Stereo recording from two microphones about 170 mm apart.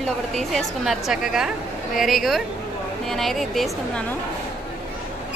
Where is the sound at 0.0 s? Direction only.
5° left (ahead or behind).